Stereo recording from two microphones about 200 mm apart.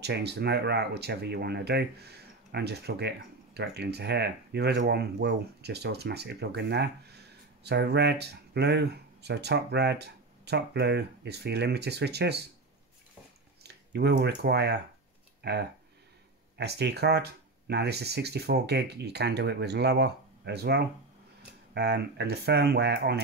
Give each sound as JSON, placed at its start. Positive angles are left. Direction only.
{"t": 0.0, "sound": "speech", "side_deg": -55}
{"t": 13.6, "sound": "speech", "side_deg": -55}